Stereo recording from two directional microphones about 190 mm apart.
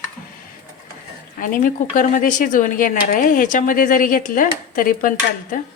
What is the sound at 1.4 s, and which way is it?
Speech, 45° left (ahead or behind).